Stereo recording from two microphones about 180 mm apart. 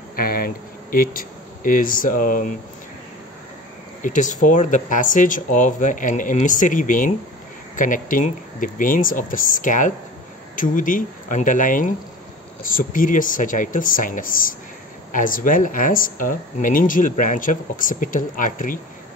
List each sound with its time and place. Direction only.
0.1 s speech: 55° left (ahead or behind)
4.0 s speech: 45° left (ahead or behind)